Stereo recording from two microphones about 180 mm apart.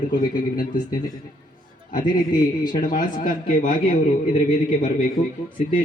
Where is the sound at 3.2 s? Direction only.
45° left (ahead or behind).